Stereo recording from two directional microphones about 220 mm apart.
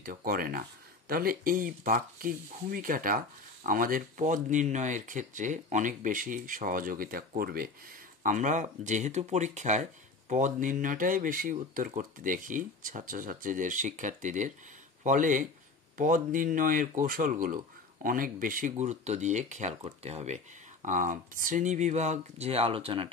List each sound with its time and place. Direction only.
0.0 s speech: 40° right (ahead or behind); by 23.1 s 25° right (ahead or behind)